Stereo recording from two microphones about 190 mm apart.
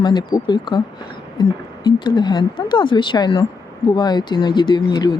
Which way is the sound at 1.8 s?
25° left (ahead or behind).